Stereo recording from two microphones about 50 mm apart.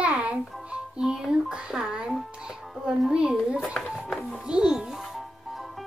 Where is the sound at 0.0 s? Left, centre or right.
Right.